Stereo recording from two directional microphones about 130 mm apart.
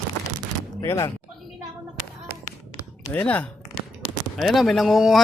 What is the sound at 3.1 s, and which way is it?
Speech, 10° left (ahead or behind).